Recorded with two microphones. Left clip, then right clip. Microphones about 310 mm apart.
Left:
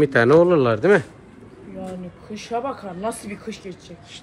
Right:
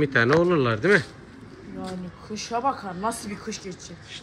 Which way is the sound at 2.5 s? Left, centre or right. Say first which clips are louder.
Even; centre.